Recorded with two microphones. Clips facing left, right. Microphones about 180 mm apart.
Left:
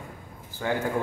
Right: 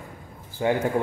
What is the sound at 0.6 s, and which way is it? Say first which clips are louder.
Speech: right 5 dB; 20° right (ahead or behind).